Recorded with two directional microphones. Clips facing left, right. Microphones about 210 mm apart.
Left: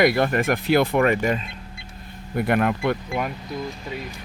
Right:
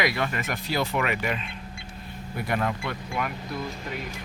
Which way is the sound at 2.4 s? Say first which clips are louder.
Left 7 dB; 60° left (ahead or behind).